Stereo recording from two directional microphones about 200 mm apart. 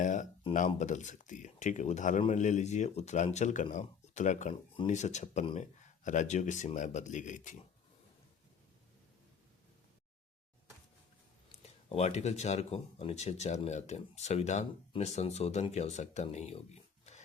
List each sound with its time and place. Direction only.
0.0 s speech: 40° left (ahead or behind)
11.6 s speech: 30° left (ahead or behind)